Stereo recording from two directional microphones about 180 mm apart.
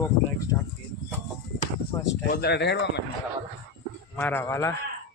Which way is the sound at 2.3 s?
70° left (ahead or behind).